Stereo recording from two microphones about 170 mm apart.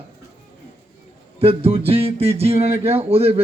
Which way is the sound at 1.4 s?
35° right (ahead or behind).